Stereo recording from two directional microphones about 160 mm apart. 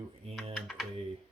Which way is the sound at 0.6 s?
Centre (ahead or behind).